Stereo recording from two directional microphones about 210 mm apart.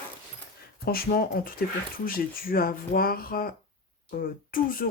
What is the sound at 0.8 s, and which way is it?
Speech, 45° left (ahead or behind).